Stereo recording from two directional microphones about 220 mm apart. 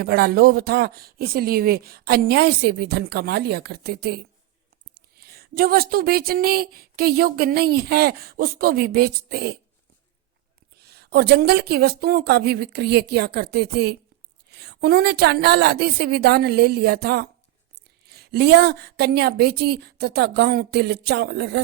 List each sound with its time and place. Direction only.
0.0 s speech: 45° right (ahead or behind)
10.8 s speech: 45° right (ahead or behind)